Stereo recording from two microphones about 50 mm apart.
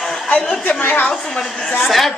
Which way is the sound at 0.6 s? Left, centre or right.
Left.